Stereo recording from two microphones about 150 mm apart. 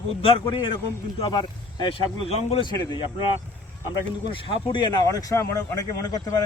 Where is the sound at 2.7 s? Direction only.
30° left (ahead or behind).